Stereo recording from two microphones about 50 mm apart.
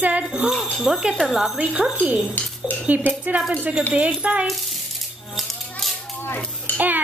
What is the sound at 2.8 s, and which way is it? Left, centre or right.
Speech, right.